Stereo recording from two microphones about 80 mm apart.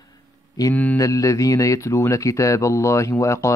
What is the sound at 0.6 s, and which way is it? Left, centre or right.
Speech, left.